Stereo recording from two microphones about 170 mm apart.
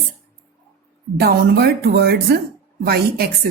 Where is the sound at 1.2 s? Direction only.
70° right (ahead or behind).